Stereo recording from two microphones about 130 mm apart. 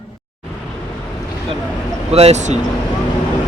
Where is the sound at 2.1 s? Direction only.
55° right (ahead or behind).